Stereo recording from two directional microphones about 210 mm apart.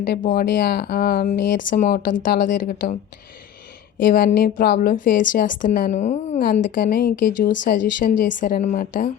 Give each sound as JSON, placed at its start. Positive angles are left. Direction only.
{"t": 0.0, "sound": "a woman's voice", "side_deg": 50}